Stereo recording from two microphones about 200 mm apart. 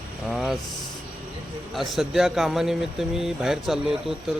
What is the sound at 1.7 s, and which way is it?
Speech, centre (ahead or behind).